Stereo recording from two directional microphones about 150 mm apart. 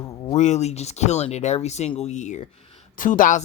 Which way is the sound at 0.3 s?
50° left (ahead or behind).